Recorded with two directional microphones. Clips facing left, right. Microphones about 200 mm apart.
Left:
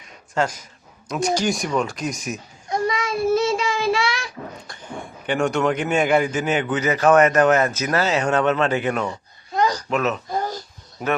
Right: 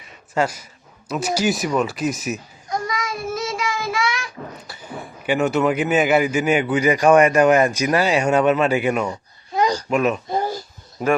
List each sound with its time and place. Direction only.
0.0 s a sound: 10° right (ahead or behind)
1.0 s speech: 5° right (ahead or behind)
2.6 s child singing: 25° left (ahead or behind)
4.6 s a child's voice: 5° right (ahead or behind)